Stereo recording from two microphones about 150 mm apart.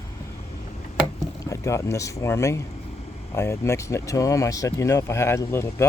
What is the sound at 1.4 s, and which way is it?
Speech, 20° left (ahead or behind).